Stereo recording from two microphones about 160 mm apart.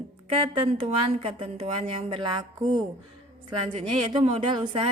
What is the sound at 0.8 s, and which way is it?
Speech, 35° right (ahead or behind).